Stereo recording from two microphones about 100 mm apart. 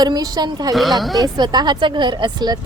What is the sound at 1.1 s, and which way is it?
A woman's voice, 40° right (ahead or behind).